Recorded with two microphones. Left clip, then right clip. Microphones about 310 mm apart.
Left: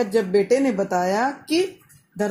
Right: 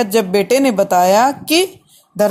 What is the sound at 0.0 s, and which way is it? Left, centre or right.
Speech, right.